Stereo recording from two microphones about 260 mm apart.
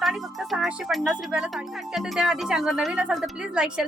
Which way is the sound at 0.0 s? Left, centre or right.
Centre.